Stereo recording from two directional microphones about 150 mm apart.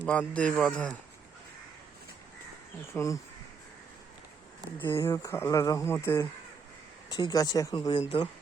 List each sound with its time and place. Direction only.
0.0 s speech: 10° left (ahead or behind)
2.9 s speech: 20° left (ahead or behind)
4.8 s speech: 15° left (ahead or behind); by 8.3 s 30° left (ahead or behind)